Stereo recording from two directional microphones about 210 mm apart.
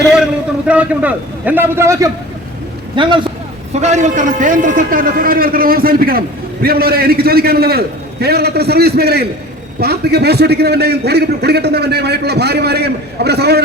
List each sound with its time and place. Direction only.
0.7 s a man's voice: 5° right (ahead or behind); by 3.2 s 25° right (ahead or behind)
3.7 s a man's voice: 35° right (ahead or behind); by 13.6 s 50° right (ahead or behind)